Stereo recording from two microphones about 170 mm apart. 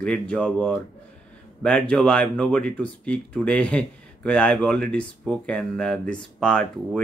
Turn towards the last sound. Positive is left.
turn(degrees=5)  # may be behind; listen again after turning